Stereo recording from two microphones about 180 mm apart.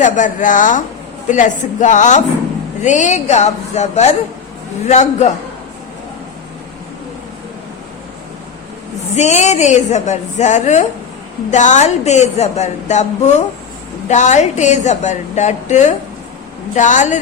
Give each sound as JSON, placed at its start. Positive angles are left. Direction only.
{"t": 0.0, "sound": "a woman's voice", "side_deg": 45}
{"t": 9.1, "sound": "a woman's voice", "side_deg": 40}